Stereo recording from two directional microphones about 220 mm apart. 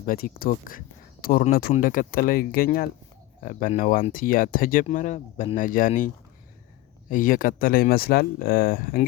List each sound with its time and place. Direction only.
0.0 s speech: 40° left (ahead or behind)
7.1 s speech: 40° left (ahead or behind)